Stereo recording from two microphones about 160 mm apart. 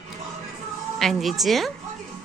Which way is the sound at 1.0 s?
Centre (ahead or behind).